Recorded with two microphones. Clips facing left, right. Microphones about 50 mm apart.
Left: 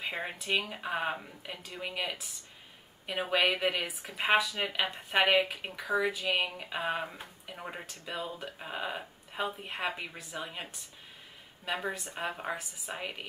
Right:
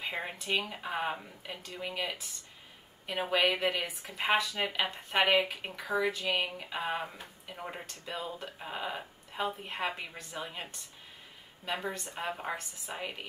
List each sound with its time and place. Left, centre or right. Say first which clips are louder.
0.0 s speech: left 1 dB; centre